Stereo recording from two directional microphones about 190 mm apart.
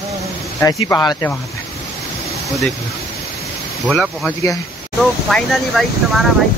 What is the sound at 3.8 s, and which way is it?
Speech, centre (ahead or behind).